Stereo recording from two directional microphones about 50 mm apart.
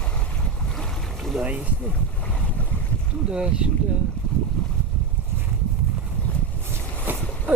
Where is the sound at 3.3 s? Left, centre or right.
Centre.